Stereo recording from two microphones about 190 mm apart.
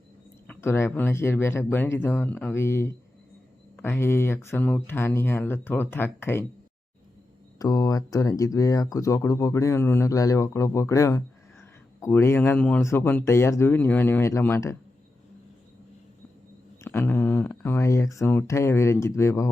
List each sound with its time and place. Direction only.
0.4 s speech: 10° left (ahead or behind)
7.6 s speech: 20° left (ahead or behind)
16.8 s speech: 10° left (ahead or behind)